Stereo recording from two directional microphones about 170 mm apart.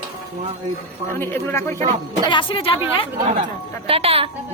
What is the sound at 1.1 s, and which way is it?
Speech, 15° left (ahead or behind).